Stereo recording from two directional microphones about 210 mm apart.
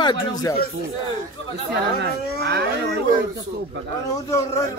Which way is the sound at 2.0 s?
50° right (ahead or behind).